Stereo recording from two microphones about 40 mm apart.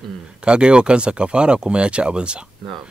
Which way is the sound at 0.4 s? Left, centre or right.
Right.